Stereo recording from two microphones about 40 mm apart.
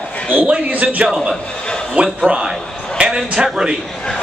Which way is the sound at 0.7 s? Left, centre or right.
Right.